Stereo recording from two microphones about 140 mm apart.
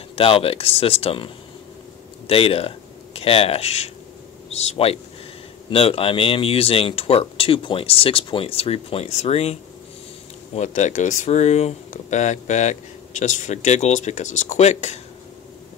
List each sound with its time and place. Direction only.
0.1 s speech: 40° left (ahead or behind)